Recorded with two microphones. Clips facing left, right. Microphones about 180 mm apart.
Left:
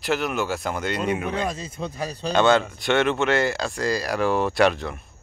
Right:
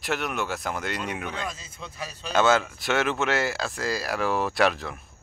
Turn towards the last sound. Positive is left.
turn(degrees=0)  # may be behind; listen again after turning